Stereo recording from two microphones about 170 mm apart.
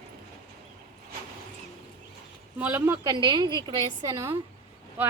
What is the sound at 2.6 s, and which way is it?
A woman's voice, 10° right (ahead or behind).